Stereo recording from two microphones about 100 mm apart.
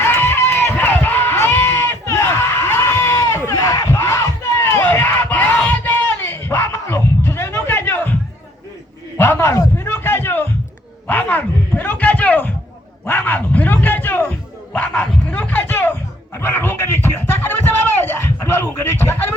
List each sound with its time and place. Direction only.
0.0 s run: 20° left (ahead or behind)
4.6 s crowd: 20° left (ahead or behind)
9.1 s a sound: 25° left (ahead or behind)
13.1 s dog: 20° left (ahead or behind)